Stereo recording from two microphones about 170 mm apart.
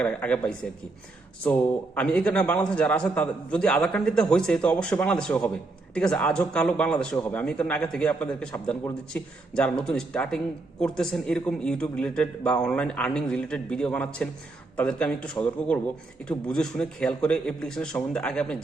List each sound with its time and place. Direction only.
0.0 s a woman's voice: 5° left (ahead or behind)